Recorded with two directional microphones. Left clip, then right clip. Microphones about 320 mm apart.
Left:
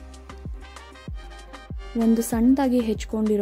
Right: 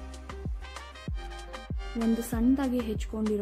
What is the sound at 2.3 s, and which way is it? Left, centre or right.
Speech, centre.